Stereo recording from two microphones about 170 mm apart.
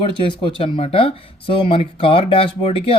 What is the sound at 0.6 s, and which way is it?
Speech, 35° left (ahead or behind).